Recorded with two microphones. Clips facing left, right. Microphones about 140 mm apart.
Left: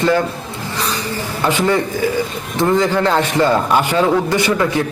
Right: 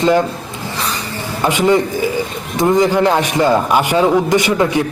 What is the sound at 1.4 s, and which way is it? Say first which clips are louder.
A man's voice: right 3 dB; 15° right (ahead or behind).